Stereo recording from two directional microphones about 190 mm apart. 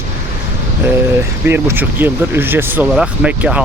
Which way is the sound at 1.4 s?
10° right (ahead or behind).